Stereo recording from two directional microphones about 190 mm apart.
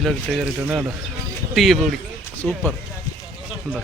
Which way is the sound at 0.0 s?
Centre (ahead or behind).